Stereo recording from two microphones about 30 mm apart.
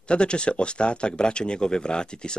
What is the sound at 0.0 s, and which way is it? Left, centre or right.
Speech, left.